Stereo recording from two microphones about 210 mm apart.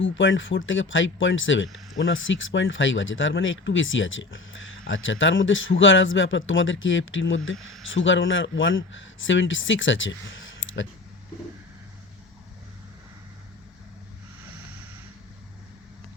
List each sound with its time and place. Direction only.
0.0 s speech: 65° left (ahead or behind)